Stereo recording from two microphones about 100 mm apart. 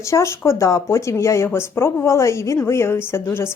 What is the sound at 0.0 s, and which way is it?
A woman's voice, 30° left (ahead or behind).